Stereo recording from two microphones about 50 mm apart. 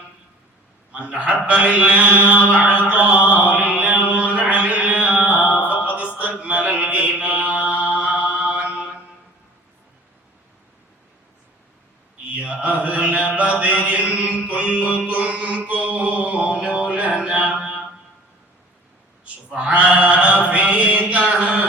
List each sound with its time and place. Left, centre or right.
0.9 s mantra: right
12.3 s mantra: right
19.5 s a sound: right